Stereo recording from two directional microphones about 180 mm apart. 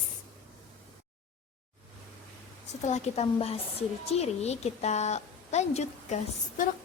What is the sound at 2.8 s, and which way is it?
A woman's voice, 40° left (ahead or behind).